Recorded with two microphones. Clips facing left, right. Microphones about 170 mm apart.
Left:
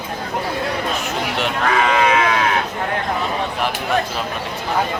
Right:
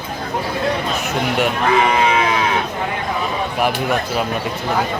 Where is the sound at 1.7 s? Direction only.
20° right (ahead or behind).